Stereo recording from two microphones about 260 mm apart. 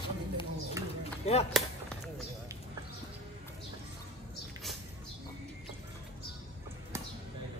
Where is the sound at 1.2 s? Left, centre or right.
Left.